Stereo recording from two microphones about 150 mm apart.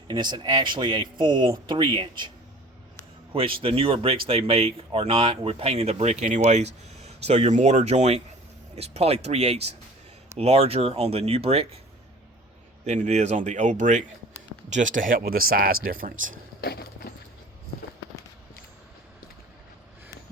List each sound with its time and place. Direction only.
0.1 s speech: 30° right (ahead or behind)
3.3 s speech: 35° right (ahead or behind)
12.8 s speech: 45° right (ahead or behind); by 16.3 s 70° right (ahead or behind)
16.6 s a sound: 90° left